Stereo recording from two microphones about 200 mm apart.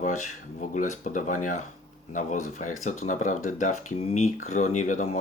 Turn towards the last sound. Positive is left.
turn(degrees=35)  # may be behind; listen again after turning